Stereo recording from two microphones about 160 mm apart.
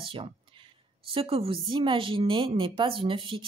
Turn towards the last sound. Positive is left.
turn(degrees=-30)  # may be behind; listen again after turning